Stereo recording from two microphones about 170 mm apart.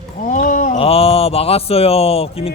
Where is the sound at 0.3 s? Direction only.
50° left (ahead or behind).